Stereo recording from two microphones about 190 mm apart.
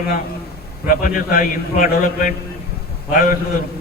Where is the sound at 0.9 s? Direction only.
45° left (ahead or behind).